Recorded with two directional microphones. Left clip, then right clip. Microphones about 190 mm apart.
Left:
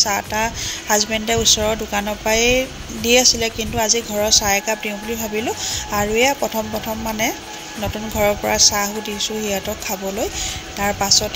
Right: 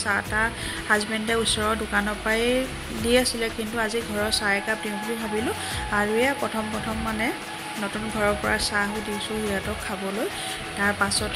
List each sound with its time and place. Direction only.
0.0 s a woman's voice: 25° left (ahead or behind)
8.2 s a woman's voice: 25° left (ahead or behind)
10.8 s a woman's voice: 20° left (ahead or behind)